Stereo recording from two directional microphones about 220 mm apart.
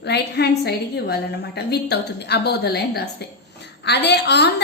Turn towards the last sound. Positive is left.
turn(degrees=50)  # may be behind; listen again after turning